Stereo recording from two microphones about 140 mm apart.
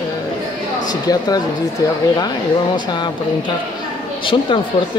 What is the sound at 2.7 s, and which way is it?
Speech, 30° left (ahead or behind).